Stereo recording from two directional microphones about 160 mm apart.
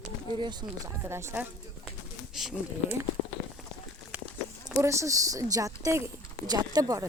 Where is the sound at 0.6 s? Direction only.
25° right (ahead or behind).